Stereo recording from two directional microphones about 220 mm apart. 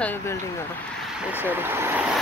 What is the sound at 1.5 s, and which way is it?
Speech, 10° right (ahead or behind).